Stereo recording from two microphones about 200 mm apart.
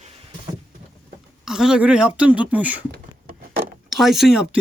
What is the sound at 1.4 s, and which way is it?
Speech, 5° right (ahead or behind).